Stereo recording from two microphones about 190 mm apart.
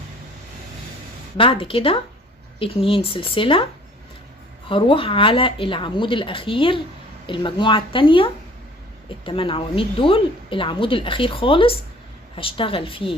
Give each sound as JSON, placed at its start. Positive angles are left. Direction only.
{"t": 1.4, "sound": "speech", "side_deg": 30}
{"t": 4.7, "sound": "speech", "side_deg": 25}